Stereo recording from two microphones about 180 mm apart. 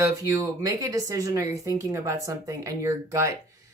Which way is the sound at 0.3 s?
20° right (ahead or behind).